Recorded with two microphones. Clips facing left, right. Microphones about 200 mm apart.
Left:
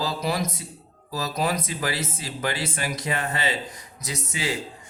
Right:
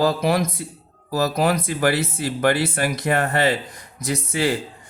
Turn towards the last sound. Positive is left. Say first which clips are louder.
# right 8 dB
turn(degrees=-55)  # may be behind; listen again after turning